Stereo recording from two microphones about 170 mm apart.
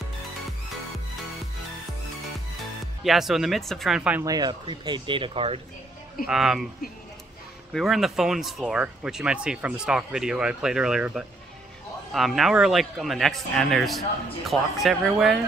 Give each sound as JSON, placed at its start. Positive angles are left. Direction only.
{"t": 3.0, "sound": "speech", "side_deg": 0}
{"t": 4.2, "sound": "speech", "side_deg": -25}
{"t": 6.2, "sound": "speech", "side_deg": -5}
{"t": 7.7, "sound": "speech", "side_deg": 0}